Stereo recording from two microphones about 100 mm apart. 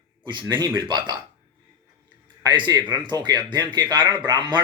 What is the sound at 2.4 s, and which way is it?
Speech, 45° right (ahead or behind).